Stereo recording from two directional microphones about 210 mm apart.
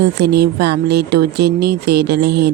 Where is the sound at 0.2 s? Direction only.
50° right (ahead or behind).